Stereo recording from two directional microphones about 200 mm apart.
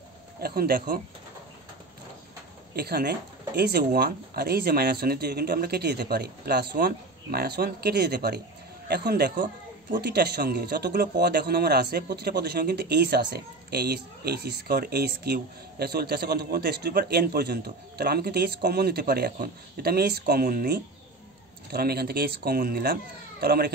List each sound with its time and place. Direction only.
0.4 s speech: 50° right (ahead or behind)
2.7 s speech: 50° right (ahead or behind)